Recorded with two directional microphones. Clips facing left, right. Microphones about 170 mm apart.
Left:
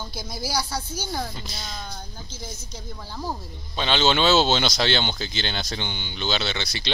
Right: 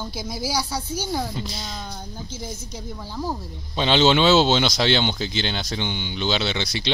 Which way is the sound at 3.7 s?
25° right (ahead or behind).